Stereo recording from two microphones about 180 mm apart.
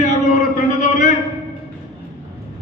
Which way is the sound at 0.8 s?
40° left (ahead or behind).